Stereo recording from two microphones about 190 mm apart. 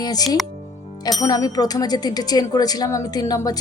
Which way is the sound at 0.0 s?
20° left (ahead or behind).